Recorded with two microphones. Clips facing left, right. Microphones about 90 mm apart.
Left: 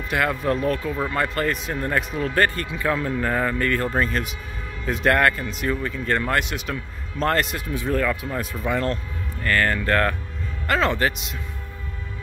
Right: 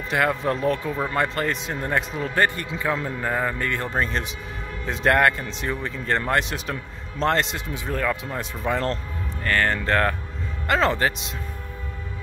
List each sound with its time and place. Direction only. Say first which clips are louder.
0.1 s a man's voice: even; 25° right (ahead or behind)